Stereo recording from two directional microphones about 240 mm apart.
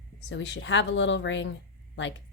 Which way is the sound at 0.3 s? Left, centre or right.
Left.